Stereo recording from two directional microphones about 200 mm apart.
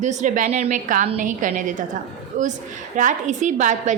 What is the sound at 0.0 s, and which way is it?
A woman's voice, 35° right (ahead or behind).